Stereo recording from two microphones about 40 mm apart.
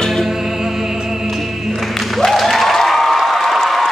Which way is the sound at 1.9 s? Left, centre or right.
Centre.